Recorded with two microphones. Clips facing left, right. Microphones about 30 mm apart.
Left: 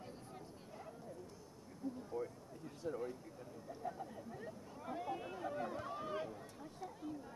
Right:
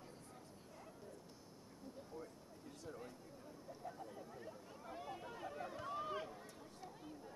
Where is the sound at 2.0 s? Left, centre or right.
Left.